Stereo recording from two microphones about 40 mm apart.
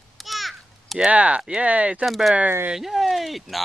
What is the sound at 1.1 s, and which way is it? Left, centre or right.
Speech, right.